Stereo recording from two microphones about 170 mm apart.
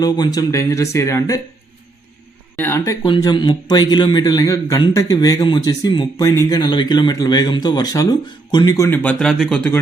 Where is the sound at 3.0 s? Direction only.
25° left (ahead or behind).